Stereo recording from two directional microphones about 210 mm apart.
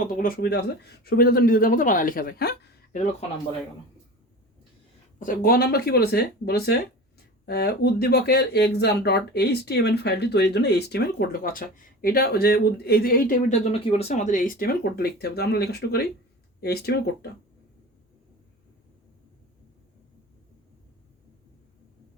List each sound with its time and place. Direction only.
0.2 s speech: 45° left (ahead or behind)
5.2 s speech: 45° left (ahead or behind)
13.9 s speech: 30° left (ahead or behind); by 17.0 s 50° left (ahead or behind)